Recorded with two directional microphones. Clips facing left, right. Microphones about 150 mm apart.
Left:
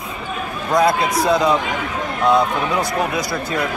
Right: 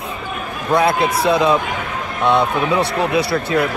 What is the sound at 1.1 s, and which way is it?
Speech, 25° right (ahead or behind).